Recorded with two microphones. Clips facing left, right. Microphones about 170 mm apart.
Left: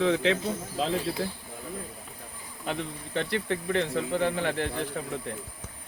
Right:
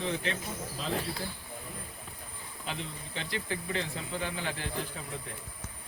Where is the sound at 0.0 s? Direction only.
90° left.